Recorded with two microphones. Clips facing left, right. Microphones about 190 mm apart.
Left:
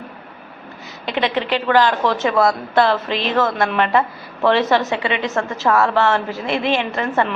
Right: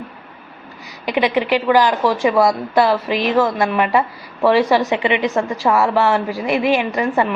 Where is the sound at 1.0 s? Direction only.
15° right (ahead or behind).